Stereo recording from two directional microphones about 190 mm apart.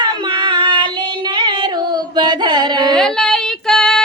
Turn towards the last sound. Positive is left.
turn(degrees=0)  # may be behind; listen again after turning